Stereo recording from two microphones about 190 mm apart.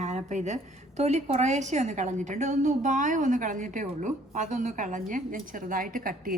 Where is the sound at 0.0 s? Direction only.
40° right (ahead or behind).